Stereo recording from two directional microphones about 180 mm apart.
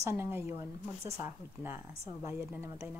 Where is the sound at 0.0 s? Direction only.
15° right (ahead or behind).